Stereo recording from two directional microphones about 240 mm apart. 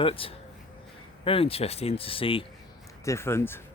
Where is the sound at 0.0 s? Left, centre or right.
Left.